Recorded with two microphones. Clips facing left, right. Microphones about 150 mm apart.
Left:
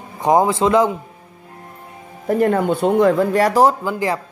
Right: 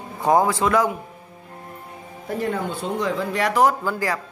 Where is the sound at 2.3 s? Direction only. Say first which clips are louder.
Left 9 dB; 55° left (ahead or behind); by 3.7 s 40° left (ahead or behind).